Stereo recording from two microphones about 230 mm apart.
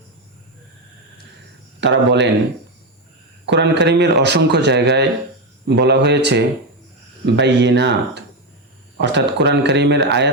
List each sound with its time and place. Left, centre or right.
1.8 s speech: right
3.4 s speech: right